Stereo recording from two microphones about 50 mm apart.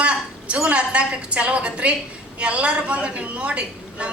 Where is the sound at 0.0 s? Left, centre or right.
Right.